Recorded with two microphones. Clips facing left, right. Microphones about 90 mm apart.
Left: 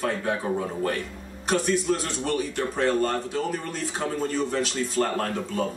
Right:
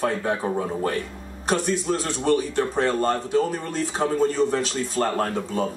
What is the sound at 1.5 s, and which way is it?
Speech, 35° right (ahead or behind).